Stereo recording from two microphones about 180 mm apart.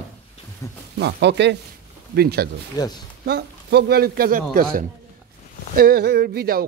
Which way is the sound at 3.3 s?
65° right (ahead or behind).